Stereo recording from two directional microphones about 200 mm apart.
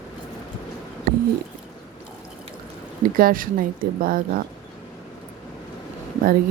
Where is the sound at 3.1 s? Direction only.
45° right (ahead or behind).